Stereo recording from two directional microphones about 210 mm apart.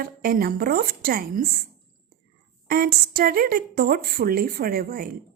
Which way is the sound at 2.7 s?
45° right (ahead or behind).